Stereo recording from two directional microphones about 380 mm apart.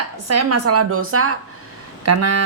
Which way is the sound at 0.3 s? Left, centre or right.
Right.